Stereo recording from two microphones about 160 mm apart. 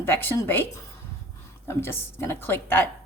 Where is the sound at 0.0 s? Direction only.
15° left (ahead or behind).